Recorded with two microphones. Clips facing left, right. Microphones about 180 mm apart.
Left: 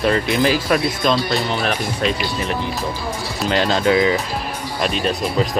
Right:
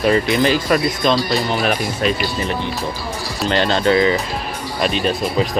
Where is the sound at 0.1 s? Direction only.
Centre (ahead or behind).